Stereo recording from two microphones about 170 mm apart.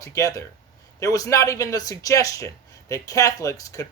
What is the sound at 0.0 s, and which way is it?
Speech, 20° left (ahead or behind).